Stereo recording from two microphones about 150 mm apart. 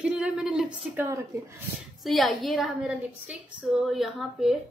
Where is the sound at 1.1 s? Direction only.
20° right (ahead or behind).